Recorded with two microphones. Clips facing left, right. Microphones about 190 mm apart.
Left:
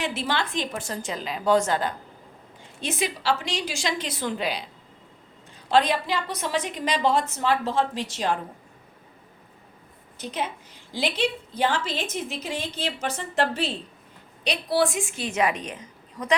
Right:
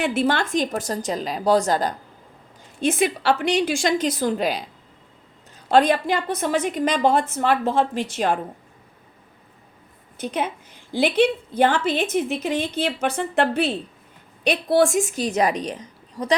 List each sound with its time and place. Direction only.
0.0 s a woman's voice: 50° right (ahead or behind)
2.8 s a woman's voice: 50° right (ahead or behind)
5.6 s a woman's voice: 50° right (ahead or behind)
10.2 s a woman's voice: 55° right (ahead or behind); by 16.3 s 35° right (ahead or behind)